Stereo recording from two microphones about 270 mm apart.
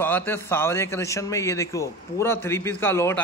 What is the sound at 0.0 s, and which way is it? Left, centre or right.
A man's voice, centre.